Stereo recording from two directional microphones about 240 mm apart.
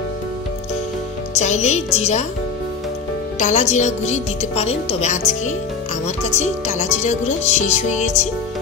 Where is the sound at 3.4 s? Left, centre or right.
Left.